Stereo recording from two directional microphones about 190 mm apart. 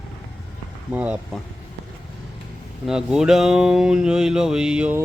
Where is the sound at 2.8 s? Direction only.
5° right (ahead or behind).